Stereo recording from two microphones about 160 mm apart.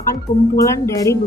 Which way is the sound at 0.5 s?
20° left (ahead or behind).